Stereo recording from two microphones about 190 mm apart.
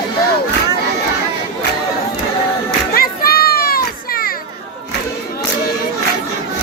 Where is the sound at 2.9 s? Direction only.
50° left (ahead or behind).